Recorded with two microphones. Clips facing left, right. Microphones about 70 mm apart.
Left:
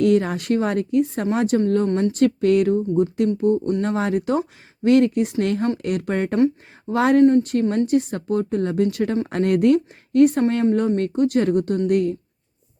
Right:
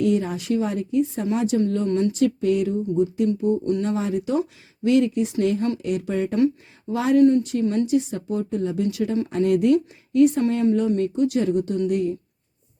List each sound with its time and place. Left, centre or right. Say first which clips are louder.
0.0 s speech: left 4 dB; left
1.9 s speech: left 1 dB; left
2.1 s speech: left 3 dB; left
2.9 s speech: left 2 dB; left
7.2 s speech: left 1 dB; left
7.4 s speech: left 2 dB; left